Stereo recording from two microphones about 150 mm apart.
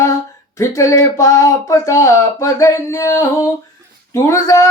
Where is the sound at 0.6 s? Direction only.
20° left (ahead or behind).